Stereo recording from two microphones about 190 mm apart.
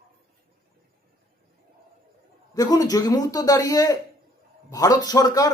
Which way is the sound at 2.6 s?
20° left (ahead or behind).